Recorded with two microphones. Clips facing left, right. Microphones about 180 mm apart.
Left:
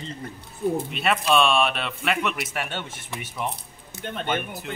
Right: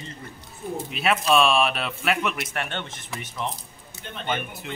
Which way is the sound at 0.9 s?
Centre (ahead or behind).